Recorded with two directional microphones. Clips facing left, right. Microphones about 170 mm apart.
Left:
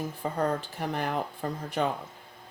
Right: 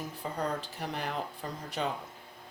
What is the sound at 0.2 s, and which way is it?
Speech, 50° left (ahead or behind).